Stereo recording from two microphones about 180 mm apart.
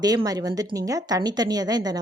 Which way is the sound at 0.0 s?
20° right (ahead or behind).